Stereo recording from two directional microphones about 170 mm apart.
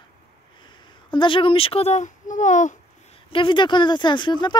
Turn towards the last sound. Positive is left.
turn(degrees=25)  # may be behind; listen again after turning